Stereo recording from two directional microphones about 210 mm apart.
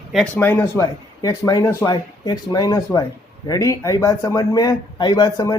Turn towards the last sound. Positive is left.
turn(degrees=15)  # may be behind; listen again after turning